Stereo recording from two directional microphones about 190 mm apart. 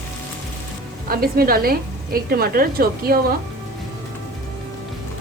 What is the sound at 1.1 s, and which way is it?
A woman's voice, 50° right (ahead or behind).